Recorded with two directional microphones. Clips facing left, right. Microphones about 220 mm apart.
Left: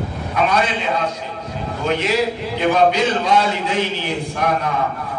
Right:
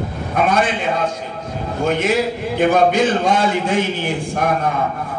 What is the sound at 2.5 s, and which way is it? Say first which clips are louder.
A man's voice: right 2 dB; 50° right (ahead or behind).